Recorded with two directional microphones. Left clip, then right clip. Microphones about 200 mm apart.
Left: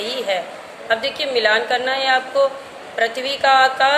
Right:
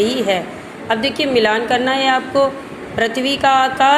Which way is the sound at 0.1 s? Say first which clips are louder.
Right 4 dB; 25° right (ahead or behind).